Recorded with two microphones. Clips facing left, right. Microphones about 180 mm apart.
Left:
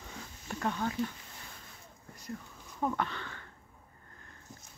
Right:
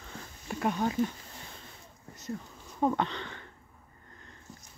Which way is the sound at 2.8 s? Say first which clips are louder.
Right 5 dB; 20° right (ahead or behind).